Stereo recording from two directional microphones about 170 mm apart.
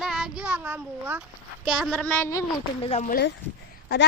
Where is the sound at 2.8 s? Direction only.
35° left (ahead or behind).